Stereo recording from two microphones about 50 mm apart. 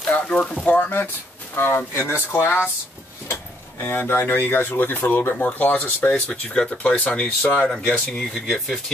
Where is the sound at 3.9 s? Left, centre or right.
Left.